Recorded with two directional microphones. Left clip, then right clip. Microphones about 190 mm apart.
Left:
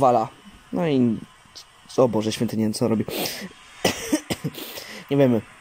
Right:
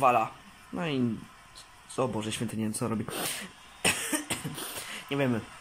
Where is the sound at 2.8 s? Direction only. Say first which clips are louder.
Left 9 dB; 25° left (ahead or behind).